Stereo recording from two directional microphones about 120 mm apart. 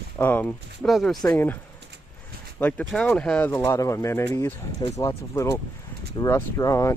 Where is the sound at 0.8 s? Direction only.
Centre (ahead or behind).